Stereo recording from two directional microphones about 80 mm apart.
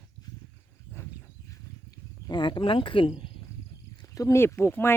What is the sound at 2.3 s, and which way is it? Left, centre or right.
Speech, left.